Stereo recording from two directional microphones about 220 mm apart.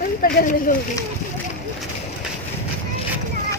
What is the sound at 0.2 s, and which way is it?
Speech, 40° left (ahead or behind).